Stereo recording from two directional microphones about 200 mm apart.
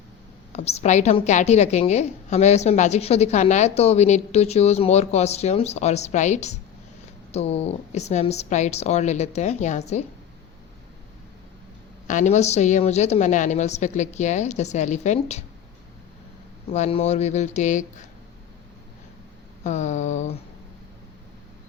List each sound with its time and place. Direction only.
0.5 s a woman's voice: 30° left (ahead or behind)
12.0 s a woman's voice: 40° left (ahead or behind)
16.7 s a woman's voice: 35° left (ahead or behind)
19.6 s a woman's voice: 35° left (ahead or behind)